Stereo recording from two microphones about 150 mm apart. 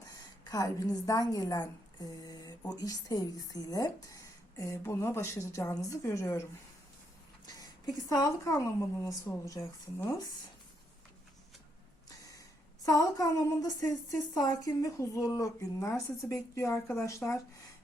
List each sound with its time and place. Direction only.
0.4 s a woman's voice: 20° left (ahead or behind)
7.4 s a woman's voice: 25° left (ahead or behind)
12.0 s a sound: 25° left (ahead or behind)
12.9 s a woman's voice: 25° left (ahead or behind)